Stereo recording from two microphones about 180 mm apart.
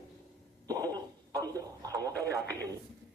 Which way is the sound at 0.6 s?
20° right (ahead or behind).